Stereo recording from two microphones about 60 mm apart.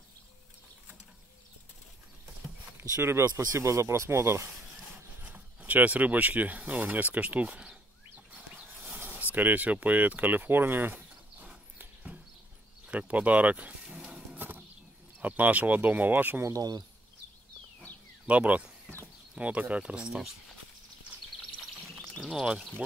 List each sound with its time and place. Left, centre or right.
2.8 s speech: right
5.2 s speech: right
7.4 s speech: centre
8.3 s a sound: right
11.8 s horse: right
12.8 s speech: right
13.9 s music: centre
14.3 s wild animals: right
15.1 s speech: right
16.4 s speech: right
18.2 s speech: right
21.8 s bird: right
22.2 s speech: centre